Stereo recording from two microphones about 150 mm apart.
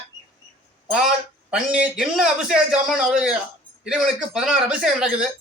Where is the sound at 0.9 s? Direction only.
5° right (ahead or behind).